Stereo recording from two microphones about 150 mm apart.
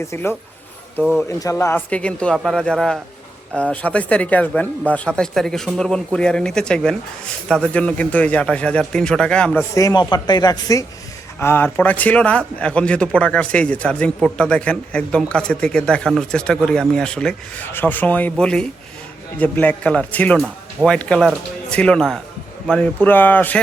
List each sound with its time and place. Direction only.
0.1 s speech: 15° left (ahead or behind)
9.7 s speech: 25° left (ahead or behind)